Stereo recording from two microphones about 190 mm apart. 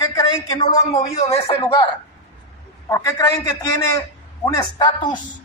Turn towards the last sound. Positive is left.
turn(degrees=25)  # may be behind; listen again after turning